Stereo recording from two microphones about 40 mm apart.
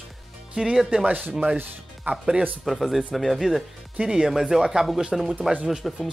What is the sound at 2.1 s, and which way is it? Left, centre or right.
Speech, right.